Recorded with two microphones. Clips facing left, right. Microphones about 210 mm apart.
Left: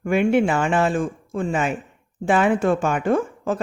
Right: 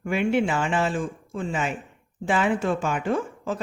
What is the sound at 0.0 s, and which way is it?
Speech, 50° left (ahead or behind).